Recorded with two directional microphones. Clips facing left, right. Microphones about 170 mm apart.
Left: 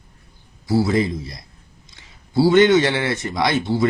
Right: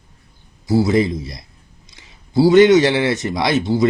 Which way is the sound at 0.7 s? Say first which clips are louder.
Right 3 dB; 20° right (ahead or behind).